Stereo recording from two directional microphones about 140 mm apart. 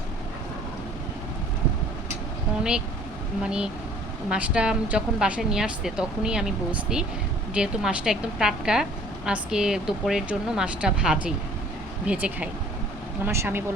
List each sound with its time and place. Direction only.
3.4 s a woman's voice: 5° right (ahead or behind)